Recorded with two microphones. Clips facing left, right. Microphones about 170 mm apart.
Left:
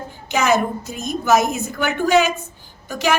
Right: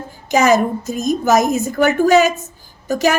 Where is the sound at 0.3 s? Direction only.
40° right (ahead or behind).